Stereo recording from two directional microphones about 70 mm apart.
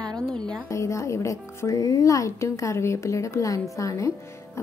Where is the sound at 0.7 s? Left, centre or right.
Left.